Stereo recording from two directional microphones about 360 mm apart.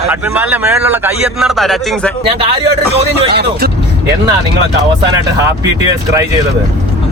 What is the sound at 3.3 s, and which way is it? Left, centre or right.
Speech, right.